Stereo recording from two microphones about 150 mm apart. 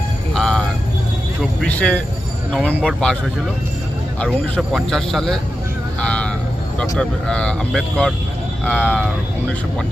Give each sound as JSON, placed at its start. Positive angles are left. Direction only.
{"t": 0.3, "sound": "music", "side_deg": 5}
{"t": 1.6, "sound": "speech", "side_deg": 10}
{"t": 4.2, "sound": "speech", "side_deg": 5}
{"t": 6.0, "sound": "music", "side_deg": 5}
{"t": 6.9, "sound": "speech", "side_deg": 5}